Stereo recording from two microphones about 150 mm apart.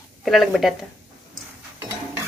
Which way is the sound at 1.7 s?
20° right (ahead or behind).